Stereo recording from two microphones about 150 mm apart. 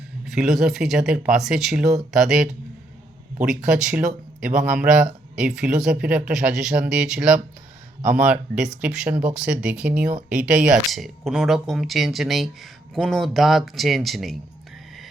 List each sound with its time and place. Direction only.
0.3 s speech: centre (ahead or behind)